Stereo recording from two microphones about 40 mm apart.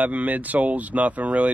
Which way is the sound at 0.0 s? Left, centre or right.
Right.